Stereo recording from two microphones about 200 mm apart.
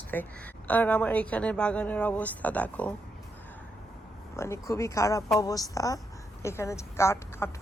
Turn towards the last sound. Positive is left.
turn(degrees=15)  # may be behind; listen again after turning